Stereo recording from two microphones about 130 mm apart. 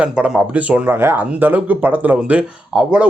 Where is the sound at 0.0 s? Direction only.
5° right (ahead or behind).